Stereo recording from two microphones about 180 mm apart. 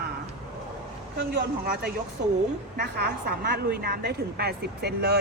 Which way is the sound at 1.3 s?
65° right (ahead or behind).